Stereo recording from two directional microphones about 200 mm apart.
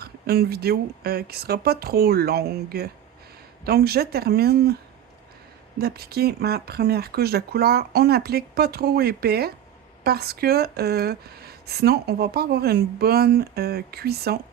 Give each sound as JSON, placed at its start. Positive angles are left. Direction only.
{"t": 0.0, "sound": "speech", "side_deg": -50}
{"t": 5.8, "sound": "speech", "side_deg": -50}